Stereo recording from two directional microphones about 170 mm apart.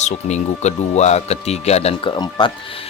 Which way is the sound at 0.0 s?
40° left (ahead or behind).